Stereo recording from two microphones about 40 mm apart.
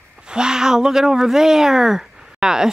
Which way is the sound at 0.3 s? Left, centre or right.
Centre.